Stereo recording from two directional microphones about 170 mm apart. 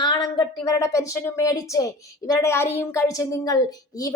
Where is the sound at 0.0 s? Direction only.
25° left (ahead or behind).